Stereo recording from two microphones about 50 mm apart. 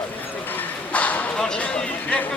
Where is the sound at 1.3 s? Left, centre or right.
Centre.